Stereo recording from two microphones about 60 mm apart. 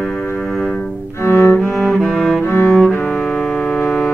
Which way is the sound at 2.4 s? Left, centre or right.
Left.